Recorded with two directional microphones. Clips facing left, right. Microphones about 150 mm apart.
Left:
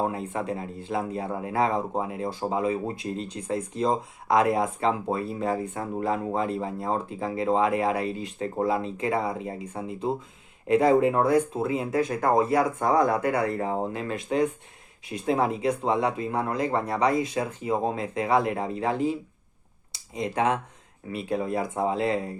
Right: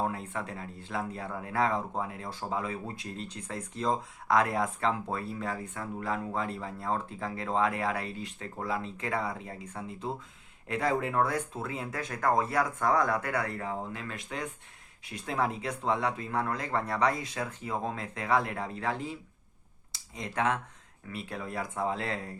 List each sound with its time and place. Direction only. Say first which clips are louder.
0.0 s speech: left 5 dB; 20° left (ahead or behind)